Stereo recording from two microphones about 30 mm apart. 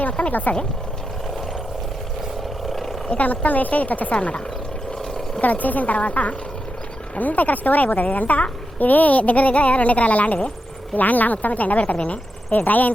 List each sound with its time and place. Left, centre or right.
0.3 s a woman's voice: left
2.6 s roar: centre
3.2 s a woman's voice: left
4.1 s speech: left
5.4 s a woman's voice: left
7.2 s a woman's voice: left
8.0 s a woman's voice: left
10.9 s a woman's voice: left
12.5 s a woman's voice: left